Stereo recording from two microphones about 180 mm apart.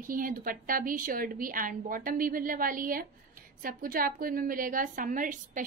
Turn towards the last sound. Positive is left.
turn(degrees=-45)  # may be behind; listen again after turning